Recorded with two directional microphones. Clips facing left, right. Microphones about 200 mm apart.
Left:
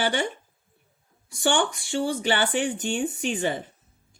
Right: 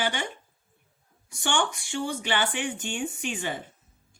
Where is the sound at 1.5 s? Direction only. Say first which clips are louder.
Left 3 dB; 40° left (ahead or behind).